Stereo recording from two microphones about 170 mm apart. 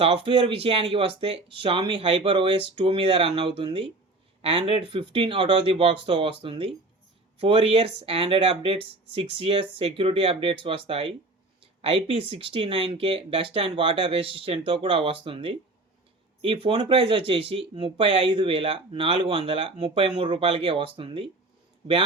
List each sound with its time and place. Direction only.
0.0 s speech: 35° right (ahead or behind)